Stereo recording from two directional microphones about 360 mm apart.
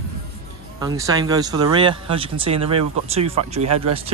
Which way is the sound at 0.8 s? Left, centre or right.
Centre.